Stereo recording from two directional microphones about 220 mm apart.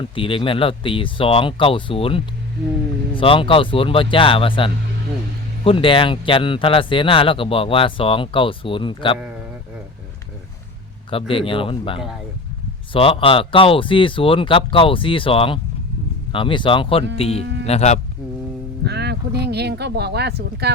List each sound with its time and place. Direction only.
0.0 s speech: 25° left (ahead or behind)
11.1 s speech: 25° left (ahead or behind)
18.9 s speech: 50° right (ahead or behind)